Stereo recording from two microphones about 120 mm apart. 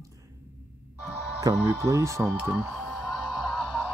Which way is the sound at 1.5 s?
30° right (ahead or behind).